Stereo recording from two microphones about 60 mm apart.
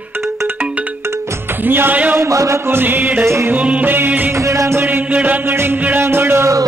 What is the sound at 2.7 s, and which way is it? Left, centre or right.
Music, right.